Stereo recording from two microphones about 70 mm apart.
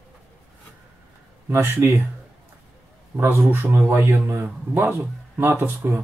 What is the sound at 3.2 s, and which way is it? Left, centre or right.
Speech, right.